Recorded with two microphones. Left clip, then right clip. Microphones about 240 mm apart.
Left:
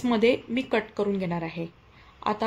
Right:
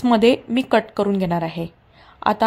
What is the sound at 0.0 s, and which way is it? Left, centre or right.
Speech, right.